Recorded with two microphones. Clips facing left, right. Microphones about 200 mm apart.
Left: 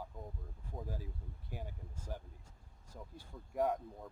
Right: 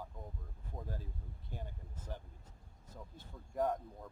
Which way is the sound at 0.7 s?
5° left (ahead or behind).